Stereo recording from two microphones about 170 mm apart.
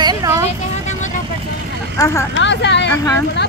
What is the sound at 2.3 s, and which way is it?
Speech, 90° left.